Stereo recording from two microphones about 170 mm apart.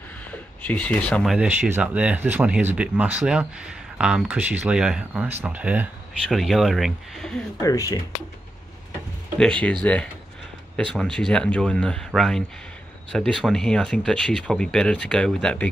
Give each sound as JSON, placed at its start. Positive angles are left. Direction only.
{"t": 0.3, "sound": "speech", "side_deg": 10}
{"t": 7.6, "sound": "speech", "side_deg": 20}
{"t": 9.4, "sound": "speech", "side_deg": 5}
{"t": 10.8, "sound": "speech", "side_deg": 5}